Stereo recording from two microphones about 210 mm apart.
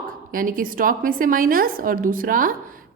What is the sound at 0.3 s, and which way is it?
A woman's voice, 40° right (ahead or behind).